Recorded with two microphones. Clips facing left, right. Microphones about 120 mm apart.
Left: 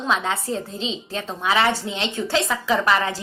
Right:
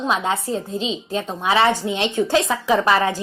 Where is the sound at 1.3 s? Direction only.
25° right (ahead or behind).